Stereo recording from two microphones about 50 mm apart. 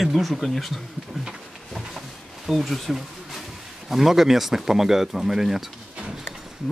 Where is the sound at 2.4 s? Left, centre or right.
Centre.